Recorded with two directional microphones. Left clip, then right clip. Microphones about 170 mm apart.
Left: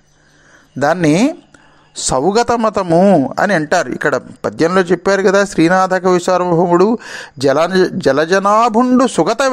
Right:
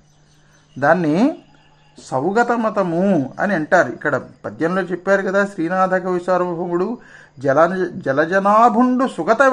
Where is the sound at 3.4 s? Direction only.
45° left (ahead or behind).